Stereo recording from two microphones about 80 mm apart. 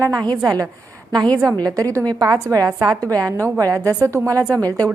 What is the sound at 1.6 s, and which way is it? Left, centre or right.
A woman's voice, right.